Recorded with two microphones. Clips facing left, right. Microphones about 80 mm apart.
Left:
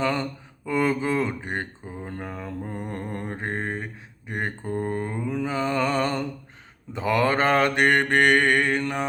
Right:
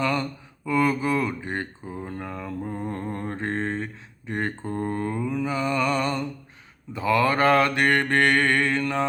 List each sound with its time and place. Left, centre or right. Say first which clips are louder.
0.0 s mantra: even; left